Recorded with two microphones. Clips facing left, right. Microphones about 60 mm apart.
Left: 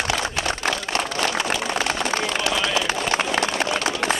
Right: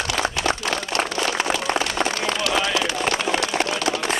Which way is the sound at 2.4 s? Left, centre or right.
Left.